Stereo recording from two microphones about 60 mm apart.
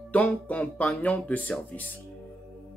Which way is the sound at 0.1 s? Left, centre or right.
Left.